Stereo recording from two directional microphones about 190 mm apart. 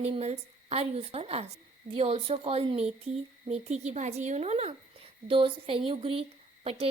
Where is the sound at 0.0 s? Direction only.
35° right (ahead or behind).